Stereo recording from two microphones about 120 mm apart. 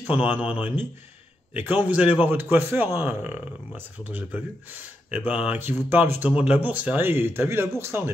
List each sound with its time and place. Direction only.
0.1 s speech: 15° right (ahead or behind)